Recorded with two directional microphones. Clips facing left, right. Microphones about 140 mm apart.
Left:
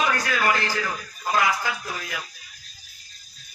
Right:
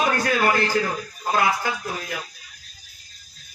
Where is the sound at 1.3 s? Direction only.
45° right (ahead or behind).